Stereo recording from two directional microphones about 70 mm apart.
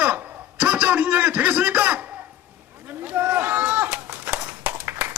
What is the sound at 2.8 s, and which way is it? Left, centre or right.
Run, right.